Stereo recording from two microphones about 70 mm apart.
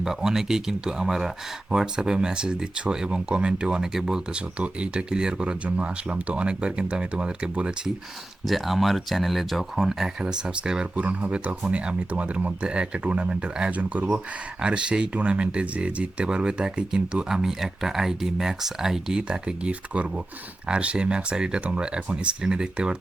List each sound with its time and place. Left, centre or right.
0.0 s speech: centre
8.4 s speech: centre